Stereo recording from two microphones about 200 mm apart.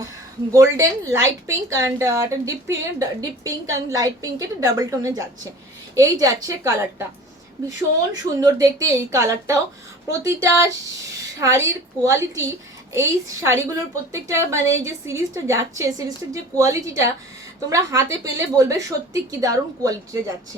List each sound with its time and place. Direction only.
0.5 s speech: 15° right (ahead or behind)
8.2 s speech: 20° right (ahead or behind)